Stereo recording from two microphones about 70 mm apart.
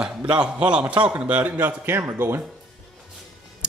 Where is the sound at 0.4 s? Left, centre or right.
Centre.